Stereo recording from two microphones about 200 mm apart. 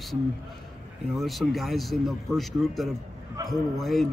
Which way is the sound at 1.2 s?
Centre (ahead or behind).